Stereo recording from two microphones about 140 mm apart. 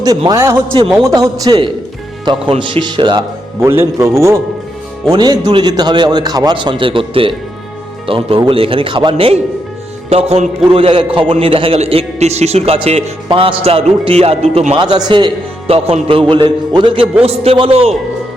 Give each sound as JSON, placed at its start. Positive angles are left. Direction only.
{"t": 0.3, "sound": "a man's voice", "side_deg": -20}
{"t": 0.7, "sound": "a man's voice", "side_deg": -40}
{"t": 3.6, "sound": "a man's voice", "side_deg": -15}
{"t": 5.1, "sound": "a man's voice", "side_deg": -30}
{"t": 13.2, "sound": "a man's voice", "side_deg": -40}
{"t": 14.8, "sound": "a man's voice", "side_deg": -30}
{"t": 15.6, "sound": "a man's voice", "side_deg": -45}